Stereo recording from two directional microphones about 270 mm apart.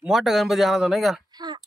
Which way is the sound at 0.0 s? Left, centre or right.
Centre.